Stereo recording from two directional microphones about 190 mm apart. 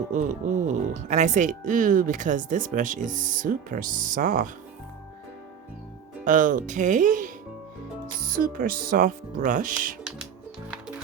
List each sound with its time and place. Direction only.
0.1 s speech: 40° right (ahead or behind)
6.2 s speech: 45° right (ahead or behind)
8.3 s speech: 50° right (ahead or behind)